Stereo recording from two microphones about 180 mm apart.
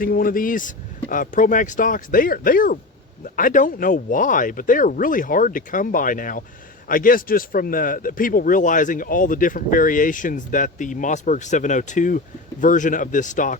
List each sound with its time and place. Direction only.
0.0 s speech: 55° left (ahead or behind)